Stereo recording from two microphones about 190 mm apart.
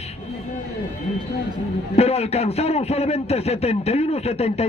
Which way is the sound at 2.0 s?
35° left (ahead or behind).